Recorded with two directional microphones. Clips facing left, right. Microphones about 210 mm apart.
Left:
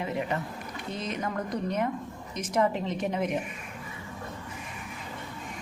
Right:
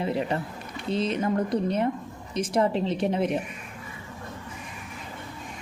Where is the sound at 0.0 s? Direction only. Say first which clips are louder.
Right 4 dB; 30° right (ahead or behind).